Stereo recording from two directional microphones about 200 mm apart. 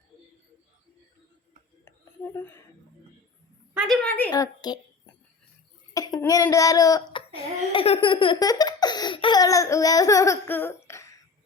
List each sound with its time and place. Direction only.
1.8 s a sound: 10° left (ahead or behind)
3.8 s a woman's voice: centre (ahead or behind)
4.3 s speech: 20° left (ahead or behind)
5.9 s speech: 15° left (ahead or behind)